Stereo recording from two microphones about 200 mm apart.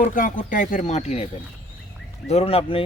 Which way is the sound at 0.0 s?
40° left (ahead or behind).